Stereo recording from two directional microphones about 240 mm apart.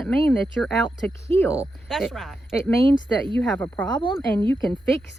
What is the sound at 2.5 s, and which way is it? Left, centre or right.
A woman's voice, centre.